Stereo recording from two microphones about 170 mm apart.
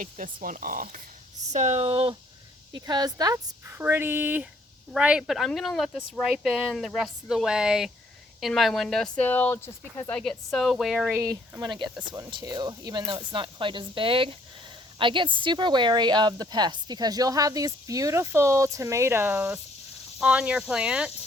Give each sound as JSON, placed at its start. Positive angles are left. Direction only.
{"t": 0.0, "sound": "speech", "side_deg": -50}
{"t": 1.5, "sound": "speech", "side_deg": -40}
{"t": 11.2, "sound": "speech", "side_deg": -20}